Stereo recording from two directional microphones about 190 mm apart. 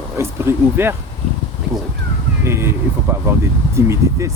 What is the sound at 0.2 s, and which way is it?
Speech, 15° right (ahead or behind).